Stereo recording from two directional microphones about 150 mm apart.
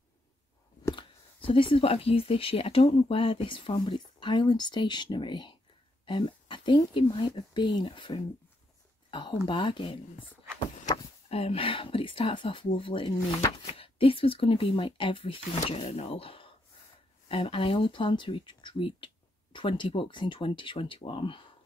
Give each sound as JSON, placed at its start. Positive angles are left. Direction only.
{"t": 0.9, "sound": "speech", "side_deg": 35}
{"t": 11.2, "sound": "speech", "side_deg": 40}
{"t": 13.7, "sound": "speech", "side_deg": 40}